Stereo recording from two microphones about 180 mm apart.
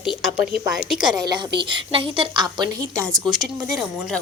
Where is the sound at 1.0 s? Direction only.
25° right (ahead or behind).